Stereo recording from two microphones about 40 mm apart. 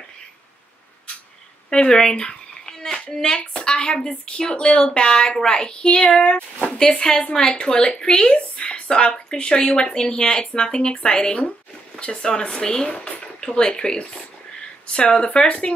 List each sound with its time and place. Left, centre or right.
1.7 s a woman's voice: centre
2.2 s a sound: centre
3.3 s a woman's voice: left
7.0 s a woman's voice: centre
15.2 s speech: left